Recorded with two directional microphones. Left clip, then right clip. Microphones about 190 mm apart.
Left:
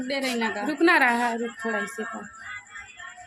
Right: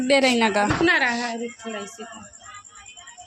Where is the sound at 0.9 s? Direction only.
50° left (ahead or behind).